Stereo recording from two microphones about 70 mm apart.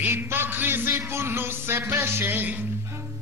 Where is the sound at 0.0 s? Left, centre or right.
Right.